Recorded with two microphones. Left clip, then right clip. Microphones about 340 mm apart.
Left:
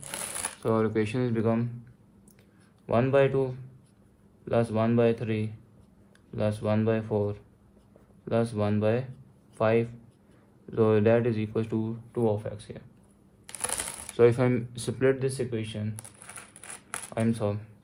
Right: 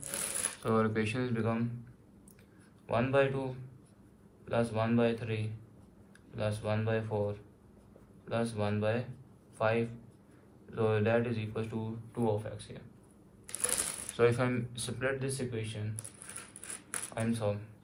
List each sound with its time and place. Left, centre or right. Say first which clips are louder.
0.6 s speech: left 5 dB; left
2.8 s speech: left 6 dB; left
14.2 s speech: left 7 dB; left
17.2 s speech: left 5 dB; left